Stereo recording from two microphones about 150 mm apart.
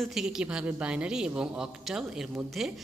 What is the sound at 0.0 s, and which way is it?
A man's voice, 5° right (ahead or behind).